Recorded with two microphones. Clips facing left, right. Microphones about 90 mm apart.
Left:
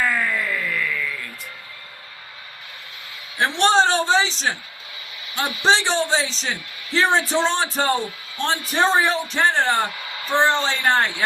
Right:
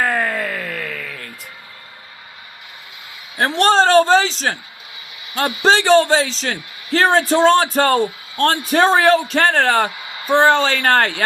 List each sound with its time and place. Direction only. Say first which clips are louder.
0.0 s a sound: right 3 dB; 55° right (ahead or behind)
3.3 s a man's voice: right 3 dB; 40° right (ahead or behind); by 9.9 s 75° right (ahead or behind)
10.2 s speech: right 6 dB; 60° right (ahead or behind)